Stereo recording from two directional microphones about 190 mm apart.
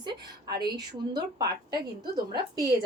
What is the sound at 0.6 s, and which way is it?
A woman's voice, 20° right (ahead or behind).